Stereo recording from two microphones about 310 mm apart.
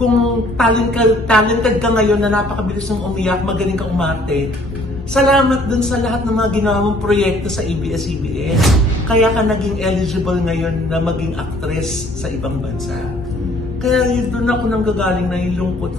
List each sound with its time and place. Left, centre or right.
0.6 s a man's voice: centre
8.5 s a man's voice: centre
13.8 s a man's voice: centre